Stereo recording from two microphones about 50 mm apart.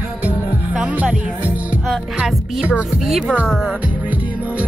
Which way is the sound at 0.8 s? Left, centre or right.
Right.